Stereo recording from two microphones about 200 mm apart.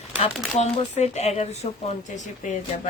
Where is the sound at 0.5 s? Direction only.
35° left (ahead or behind).